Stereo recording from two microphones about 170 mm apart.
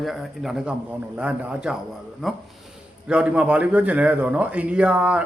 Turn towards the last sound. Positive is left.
turn(degrees=-5)  # may be behind; listen again after turning